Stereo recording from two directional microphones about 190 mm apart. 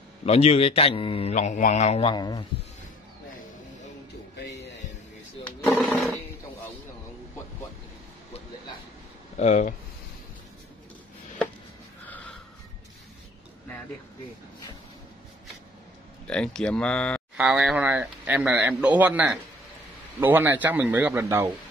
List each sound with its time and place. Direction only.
0.2 s speech: 35° left (ahead or behind)
4.4 s a sound: 65° left (ahead or behind)
5.7 s a sound: centre (ahead or behind)
9.4 s speech: 40° left (ahead or behind)
12.1 s snort: 5° left (ahead or behind)
16.3 s speech: 5° left (ahead or behind)
17.4 s speech: 5° right (ahead or behind)